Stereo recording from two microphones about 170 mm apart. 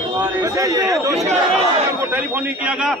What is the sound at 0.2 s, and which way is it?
A man's voice, 20° right (ahead or behind).